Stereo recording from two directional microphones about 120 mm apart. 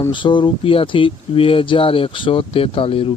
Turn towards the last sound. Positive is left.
turn(degrees=50)  # may be behind; listen again after turning